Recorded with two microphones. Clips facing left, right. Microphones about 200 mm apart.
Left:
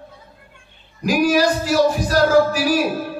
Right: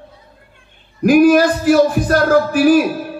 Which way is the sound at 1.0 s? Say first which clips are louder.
Right 7 dB; 55° right (ahead or behind).